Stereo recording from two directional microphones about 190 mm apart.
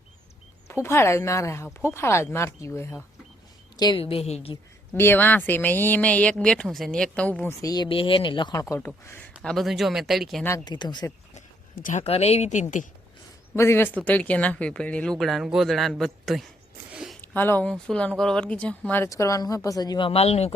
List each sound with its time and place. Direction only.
0.7 s speech: 15° left (ahead or behind)
3.8 s a woman's voice: 25° left (ahead or behind)
4.9 s speech: 10° left (ahead or behind)
9.4 s speech: centre (ahead or behind)
10.4 s a woman's voice: 20° left (ahead or behind)
11.3 s speech: 40° left (ahead or behind)
13.6 s speech: 15° left (ahead or behind); by 17.2 s 5° right (ahead or behind)
17.2 s speech: 10° left (ahead or behind); by 20.5 s 35° left (ahead or behind)